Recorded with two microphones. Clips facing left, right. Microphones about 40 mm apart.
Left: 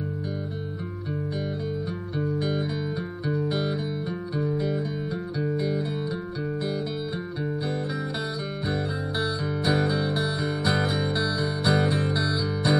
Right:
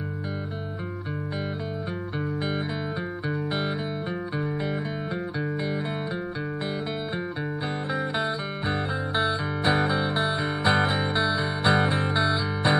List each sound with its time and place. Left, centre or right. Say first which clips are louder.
2.1 s music: left 3 dB; right
7.6 s music: right 1 dB; right